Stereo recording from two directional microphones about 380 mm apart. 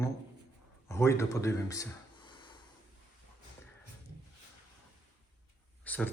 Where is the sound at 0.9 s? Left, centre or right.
Centre.